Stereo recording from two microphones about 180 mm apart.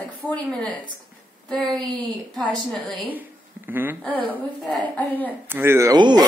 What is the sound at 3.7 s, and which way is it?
Speech, 10° right (ahead or behind).